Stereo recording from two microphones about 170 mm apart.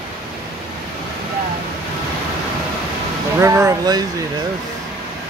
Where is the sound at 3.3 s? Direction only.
15° right (ahead or behind).